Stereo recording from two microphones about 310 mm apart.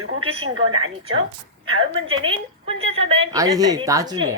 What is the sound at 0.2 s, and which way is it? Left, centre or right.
Speech, centre.